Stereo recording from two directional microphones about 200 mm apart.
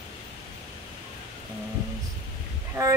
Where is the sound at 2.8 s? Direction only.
15° right (ahead or behind).